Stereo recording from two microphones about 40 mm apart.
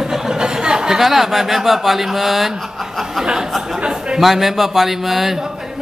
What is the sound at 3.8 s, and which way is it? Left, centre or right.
Speech, centre.